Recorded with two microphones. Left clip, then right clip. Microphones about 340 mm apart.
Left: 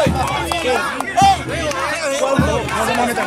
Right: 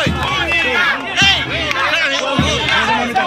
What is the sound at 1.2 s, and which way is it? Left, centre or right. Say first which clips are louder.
Music: left 1 dB; centre.